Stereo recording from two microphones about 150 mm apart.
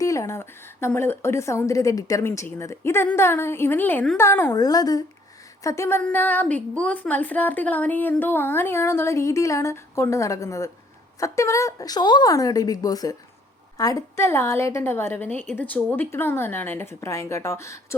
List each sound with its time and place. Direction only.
0.0 s a woman's voice: 20° left (ahead or behind)